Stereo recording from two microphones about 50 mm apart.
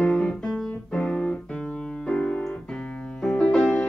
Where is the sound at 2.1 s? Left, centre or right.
Centre.